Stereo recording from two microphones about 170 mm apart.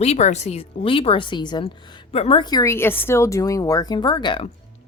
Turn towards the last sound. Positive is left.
turn(degrees=30)  # may be behind; listen again after turning